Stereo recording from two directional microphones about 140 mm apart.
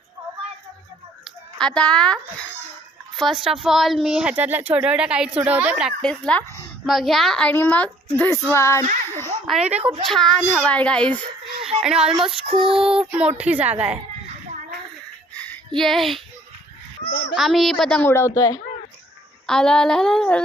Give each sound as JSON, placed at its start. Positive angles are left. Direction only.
{"t": 1.2, "sound": "a child's voice", "side_deg": 5}
{"t": 6.0, "sound": "a child's voice", "side_deg": 10}
{"t": 9.0, "sound": "a sound", "side_deg": 15}
{"t": 9.6, "sound": "a woman's voice", "side_deg": -50}
{"t": 10.1, "sound": "a woman's voice", "side_deg": 5}
{"t": 12.1, "sound": "child singing", "side_deg": -40}
{"t": 12.7, "sound": "a woman's voice", "side_deg": -5}
{"t": 15.4, "sound": "a sound", "side_deg": 5}
{"t": 17.3, "sound": "a woman's voice", "side_deg": 0}
{"t": 18.0, "sound": "speech", "side_deg": 20}
{"t": 19.5, "sound": "a woman's voice", "side_deg": 5}